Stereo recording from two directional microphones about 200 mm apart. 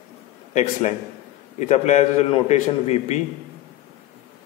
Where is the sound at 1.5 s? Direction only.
35° left (ahead or behind).